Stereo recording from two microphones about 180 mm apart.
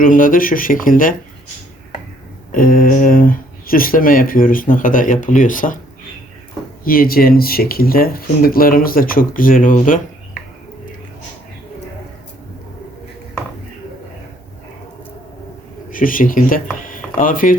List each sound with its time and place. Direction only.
0.0 s speech: 50° left (ahead or behind)
2.5 s speech: 50° left (ahead or behind)
6.8 s speech: 55° left (ahead or behind)
15.9 s speech: 50° left (ahead or behind)
16.8 s a sound: 50° left (ahead or behind)